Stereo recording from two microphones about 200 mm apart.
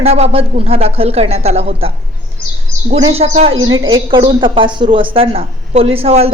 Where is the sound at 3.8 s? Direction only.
20° right (ahead or behind).